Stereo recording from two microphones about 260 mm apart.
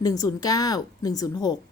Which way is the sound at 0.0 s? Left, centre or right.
Centre.